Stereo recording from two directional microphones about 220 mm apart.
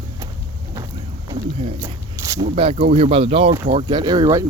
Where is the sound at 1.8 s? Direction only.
15° right (ahead or behind).